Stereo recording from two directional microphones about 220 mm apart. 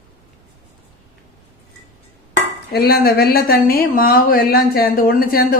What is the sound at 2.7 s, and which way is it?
Speech, 45° left (ahead or behind).